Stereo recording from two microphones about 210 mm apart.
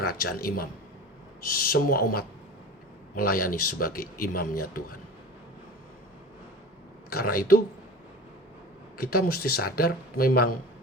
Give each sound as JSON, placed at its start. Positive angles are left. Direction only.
{"t": 0.0, "sound": "speech", "side_deg": 45}
{"t": 7.1, "sound": "speech", "side_deg": 45}
{"t": 9.0, "sound": "speech", "side_deg": 45}